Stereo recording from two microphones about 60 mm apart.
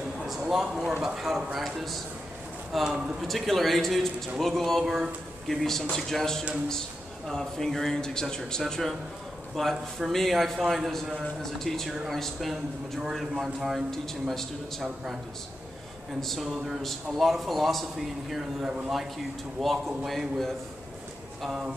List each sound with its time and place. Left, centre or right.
0.2 s a sound: centre
1.0 s a man's voice: centre
13.8 s a man's voice: centre
16.2 s a man's voice: centre
18.6 s speech: centre
18.9 s a man's voice: centre